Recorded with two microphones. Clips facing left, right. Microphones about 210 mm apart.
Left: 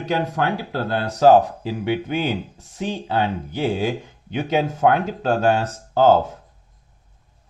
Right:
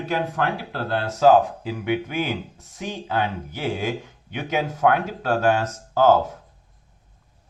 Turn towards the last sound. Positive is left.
turn(degrees=30)  # may be behind; listen again after turning